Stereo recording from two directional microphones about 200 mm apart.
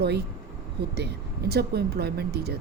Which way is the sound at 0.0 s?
55° right (ahead or behind).